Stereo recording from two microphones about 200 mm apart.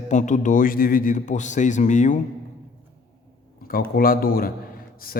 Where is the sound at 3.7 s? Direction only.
45° left (ahead or behind).